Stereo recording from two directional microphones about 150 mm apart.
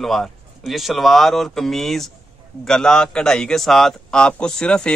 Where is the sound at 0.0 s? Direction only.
Centre (ahead or behind).